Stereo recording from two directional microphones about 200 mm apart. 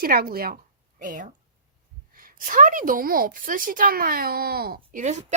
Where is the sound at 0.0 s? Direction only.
50° right (ahead or behind).